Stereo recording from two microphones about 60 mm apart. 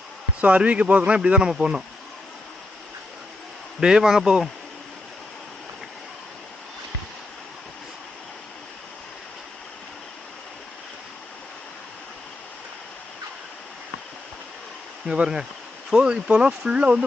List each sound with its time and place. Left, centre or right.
0.4 s speech: right
3.8 s speech: centre
15.0 s speech: centre